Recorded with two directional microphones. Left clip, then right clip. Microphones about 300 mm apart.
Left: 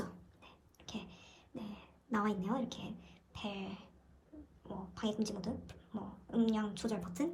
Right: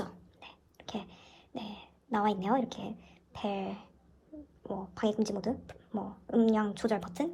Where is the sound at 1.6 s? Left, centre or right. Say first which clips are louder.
Right 7 dB; centre.